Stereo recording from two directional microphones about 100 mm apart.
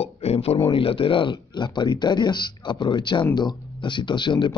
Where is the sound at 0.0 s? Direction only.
85° left.